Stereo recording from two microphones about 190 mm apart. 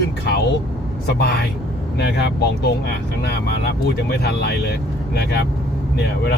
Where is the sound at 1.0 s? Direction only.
60° left (ahead or behind).